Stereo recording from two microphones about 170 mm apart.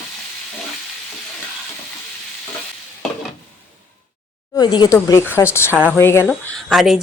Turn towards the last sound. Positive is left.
turn(degrees=0)  # may be behind; listen again after turning